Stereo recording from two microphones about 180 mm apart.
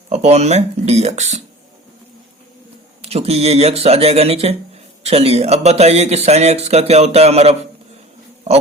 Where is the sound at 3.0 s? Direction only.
35° right (ahead or behind).